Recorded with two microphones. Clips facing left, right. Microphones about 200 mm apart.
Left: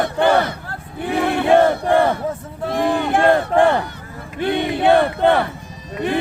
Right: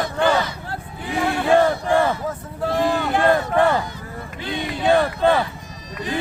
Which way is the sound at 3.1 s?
55° left (ahead or behind).